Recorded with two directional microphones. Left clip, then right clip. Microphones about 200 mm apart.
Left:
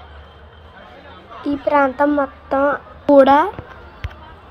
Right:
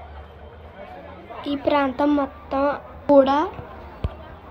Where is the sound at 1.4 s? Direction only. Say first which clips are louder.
Left 5 dB; 25° left (ahead or behind).